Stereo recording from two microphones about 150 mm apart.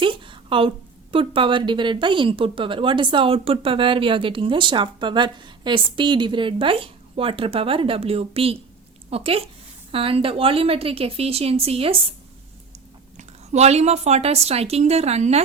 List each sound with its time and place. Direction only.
0.0 s a sound: 35° right (ahead or behind)
1.1 s a woman's voice: 35° right (ahead or behind)
13.1 s a woman's voice: 50° right (ahead or behind)